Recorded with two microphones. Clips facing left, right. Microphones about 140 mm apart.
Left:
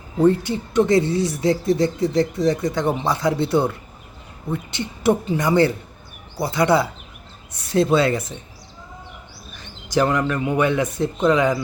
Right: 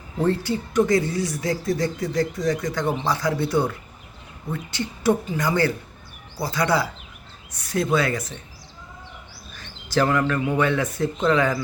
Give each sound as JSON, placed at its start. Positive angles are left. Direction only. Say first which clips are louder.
{"t": 0.2, "sound": "speech", "louder": "left 5 dB", "side_deg": 20}
{"t": 9.5, "sound": "speech", "louder": "left 3 dB", "side_deg": 15}